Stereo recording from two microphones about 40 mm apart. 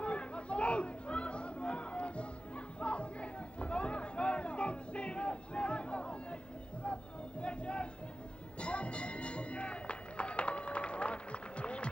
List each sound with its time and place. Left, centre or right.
0.0 s chatter: left
2.8 s a sound: left
6.8 s music: left